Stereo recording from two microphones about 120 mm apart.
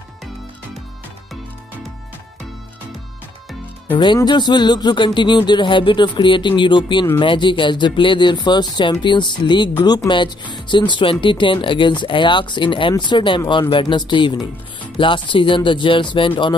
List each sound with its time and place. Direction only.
4.0 s speech: 40° left (ahead or behind)